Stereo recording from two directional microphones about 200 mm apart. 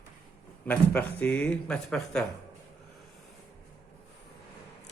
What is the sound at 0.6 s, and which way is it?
Speech, 10° left (ahead or behind).